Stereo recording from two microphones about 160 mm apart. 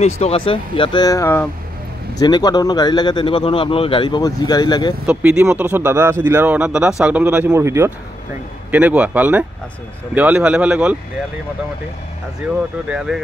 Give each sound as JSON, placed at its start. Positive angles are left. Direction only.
{"t": 0.0, "sound": "speech", "side_deg": 40}
{"t": 2.1, "sound": "speech", "side_deg": 25}
{"t": 5.0, "sound": "speech", "side_deg": -10}
{"t": 12.9, "sound": "speech", "side_deg": -5}